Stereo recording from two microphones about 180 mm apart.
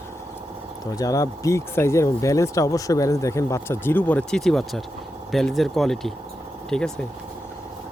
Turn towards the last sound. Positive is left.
turn(degrees=5)  # may be behind; listen again after turning